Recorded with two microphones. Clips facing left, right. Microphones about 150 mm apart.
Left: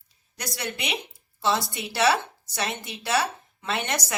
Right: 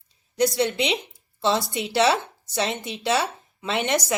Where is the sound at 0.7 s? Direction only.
25° right (ahead or behind).